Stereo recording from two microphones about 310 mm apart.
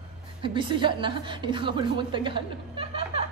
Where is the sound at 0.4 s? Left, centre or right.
Centre.